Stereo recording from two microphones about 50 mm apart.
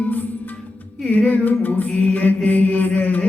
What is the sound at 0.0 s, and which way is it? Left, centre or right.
Music, left.